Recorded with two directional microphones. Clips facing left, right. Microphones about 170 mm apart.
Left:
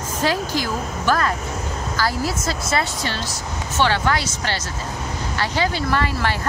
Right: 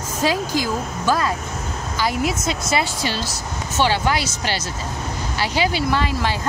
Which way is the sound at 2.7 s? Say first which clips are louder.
Right 2 dB; 5° right (ahead or behind).